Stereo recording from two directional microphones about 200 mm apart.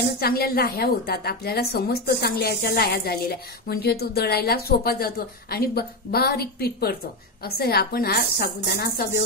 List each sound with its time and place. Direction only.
0.2 s a woman's voice: 50° left (ahead or behind)